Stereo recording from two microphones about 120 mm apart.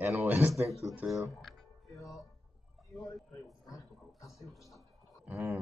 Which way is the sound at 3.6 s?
30° left (ahead or behind).